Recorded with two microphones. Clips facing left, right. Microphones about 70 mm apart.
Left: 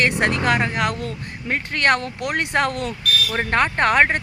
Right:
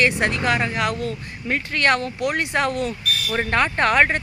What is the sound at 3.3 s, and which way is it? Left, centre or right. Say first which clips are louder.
Speech: even; left.